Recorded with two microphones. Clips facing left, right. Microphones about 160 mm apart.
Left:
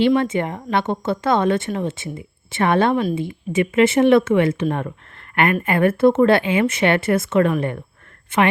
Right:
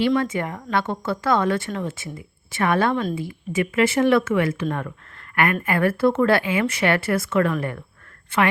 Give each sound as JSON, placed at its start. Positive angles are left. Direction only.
{"t": 0.0, "sound": "speech", "side_deg": 25}
{"t": 2.9, "sound": "speech", "side_deg": 15}